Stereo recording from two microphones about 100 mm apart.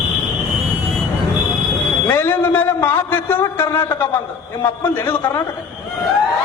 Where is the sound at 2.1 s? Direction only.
20° left (ahead or behind).